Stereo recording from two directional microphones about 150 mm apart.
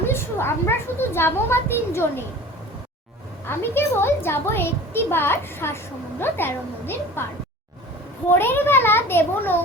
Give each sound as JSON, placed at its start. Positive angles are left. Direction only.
{"t": 0.1, "sound": "a woman's voice", "side_deg": 15}
{"t": 3.4, "sound": "a woman's voice", "side_deg": 15}
{"t": 8.3, "sound": "a woman's voice", "side_deg": 15}